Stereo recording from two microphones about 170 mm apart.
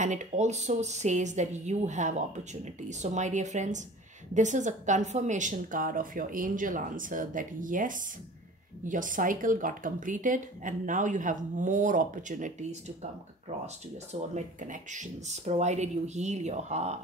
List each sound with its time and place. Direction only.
0.0 s a woman's voice: 45° right (ahead or behind)
14.1 s speech: 45° right (ahead or behind)